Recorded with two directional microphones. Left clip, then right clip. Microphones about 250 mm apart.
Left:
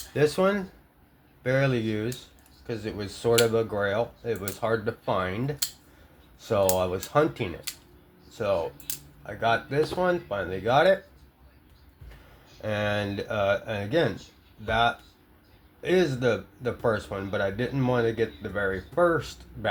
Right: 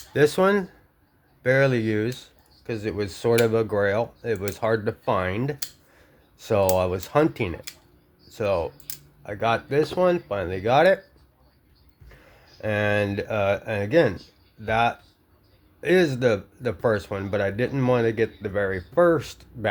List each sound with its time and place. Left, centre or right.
0.1 s speech: right
12.6 s speech: right